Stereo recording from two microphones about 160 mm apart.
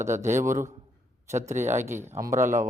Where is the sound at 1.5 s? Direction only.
45° right (ahead or behind).